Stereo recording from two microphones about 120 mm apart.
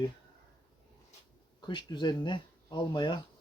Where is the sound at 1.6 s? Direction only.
40° left (ahead or behind).